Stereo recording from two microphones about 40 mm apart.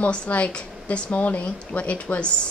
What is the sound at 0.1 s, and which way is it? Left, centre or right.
Speech, left.